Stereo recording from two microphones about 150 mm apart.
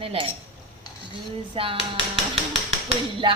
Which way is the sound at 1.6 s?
40° right (ahead or behind).